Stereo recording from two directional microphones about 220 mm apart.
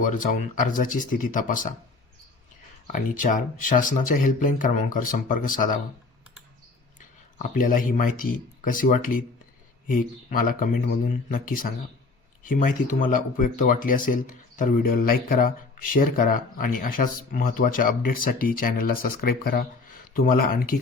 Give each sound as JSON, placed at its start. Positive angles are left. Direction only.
{"t": 0.0, "sound": "speech", "side_deg": 35}
{"t": 2.8, "sound": "speech", "side_deg": 35}
{"t": 7.0, "sound": "speech", "side_deg": 35}